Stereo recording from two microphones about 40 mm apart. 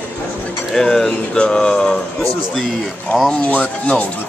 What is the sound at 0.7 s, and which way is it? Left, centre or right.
Speech, centre.